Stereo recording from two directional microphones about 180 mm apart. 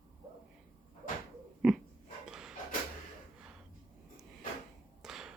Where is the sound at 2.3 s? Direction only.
5° right (ahead or behind).